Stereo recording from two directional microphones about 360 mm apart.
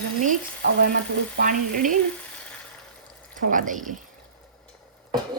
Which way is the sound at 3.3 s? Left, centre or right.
Right.